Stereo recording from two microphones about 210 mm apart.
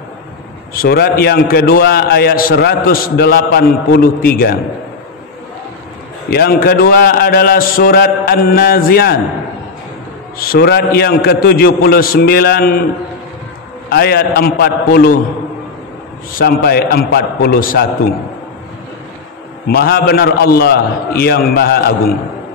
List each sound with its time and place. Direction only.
0.8 s a man's voice: 50° left (ahead or behind)
6.3 s a man's voice: 45° left (ahead or behind)
10.5 s a man's voice: 50° left (ahead or behind)
13.8 s a man's voice: 50° left (ahead or behind)
16.3 s a man's voice: 45° left (ahead or behind)
19.7 s a man's voice: 45° left (ahead or behind)